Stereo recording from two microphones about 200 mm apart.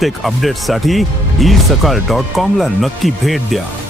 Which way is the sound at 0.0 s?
Centre (ahead or behind).